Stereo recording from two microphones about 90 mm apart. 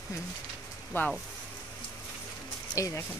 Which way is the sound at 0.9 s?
25° left (ahead or behind).